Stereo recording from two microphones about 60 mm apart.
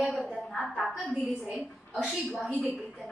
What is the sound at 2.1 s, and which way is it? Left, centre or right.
Speech, centre.